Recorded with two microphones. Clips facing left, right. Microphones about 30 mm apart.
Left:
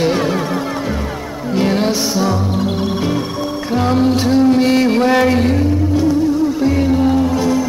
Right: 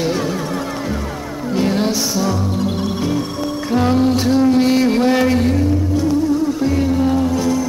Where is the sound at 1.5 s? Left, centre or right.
Centre.